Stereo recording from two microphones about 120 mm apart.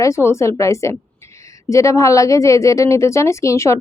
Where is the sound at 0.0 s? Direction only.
25° left (ahead or behind).